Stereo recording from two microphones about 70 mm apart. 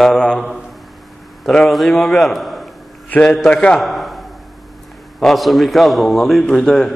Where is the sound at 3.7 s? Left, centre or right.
Centre.